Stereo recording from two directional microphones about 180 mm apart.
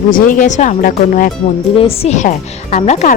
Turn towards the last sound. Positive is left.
turn(degrees=40)  # may be behind; listen again after turning